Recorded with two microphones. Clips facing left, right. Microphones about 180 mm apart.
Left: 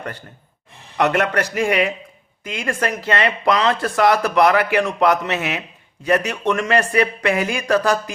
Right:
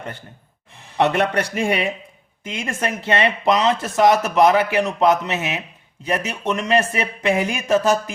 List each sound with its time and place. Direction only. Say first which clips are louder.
0.9 s speech: even; 25° right (ahead or behind)